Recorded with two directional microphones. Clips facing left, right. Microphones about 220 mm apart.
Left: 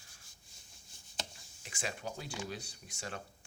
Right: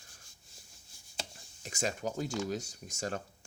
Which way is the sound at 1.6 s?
45° right (ahead or behind).